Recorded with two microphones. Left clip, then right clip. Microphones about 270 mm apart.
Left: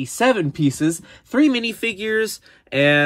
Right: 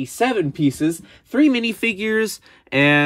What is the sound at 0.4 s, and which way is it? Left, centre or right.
A man's voice, centre.